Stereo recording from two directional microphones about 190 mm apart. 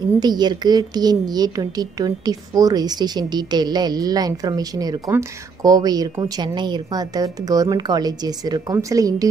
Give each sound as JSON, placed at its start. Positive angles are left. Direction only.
{"t": 0.2, "sound": "a woman's voice", "side_deg": -20}